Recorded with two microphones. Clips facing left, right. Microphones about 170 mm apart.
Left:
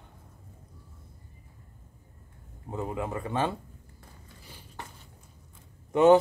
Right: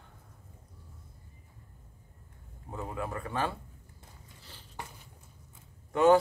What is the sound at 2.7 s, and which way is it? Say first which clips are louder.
Speech: left 4 dB; 20° left (ahead or behind).